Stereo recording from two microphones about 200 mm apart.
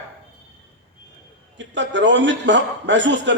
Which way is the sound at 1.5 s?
65° right (ahead or behind).